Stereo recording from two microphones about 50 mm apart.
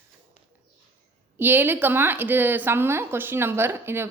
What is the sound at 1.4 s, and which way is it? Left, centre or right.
A woman's voice, right.